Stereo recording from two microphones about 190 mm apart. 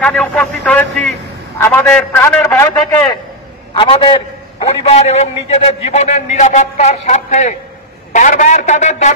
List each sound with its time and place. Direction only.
0.0 s a man's voice: 5° left (ahead or behind)
3.7 s a man's voice: 25° left (ahead or behind)